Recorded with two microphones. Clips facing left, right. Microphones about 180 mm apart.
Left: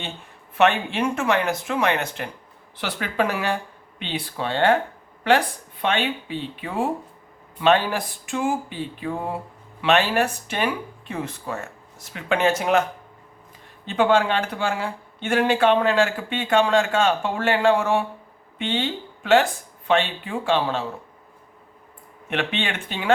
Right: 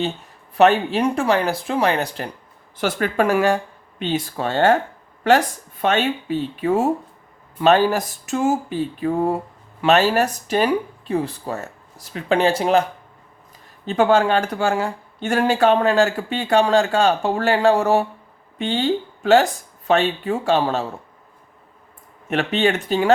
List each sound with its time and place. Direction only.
0.5 s speech: 40° right (ahead or behind)
2.7 s speech: 45° right (ahead or behind)
13.8 s speech: 45° right (ahead or behind)
22.3 s speech: 40° right (ahead or behind)